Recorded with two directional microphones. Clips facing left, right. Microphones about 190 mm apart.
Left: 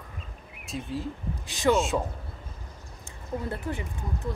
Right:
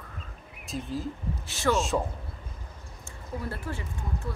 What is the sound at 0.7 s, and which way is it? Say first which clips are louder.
Speech: even; centre (ahead or behind).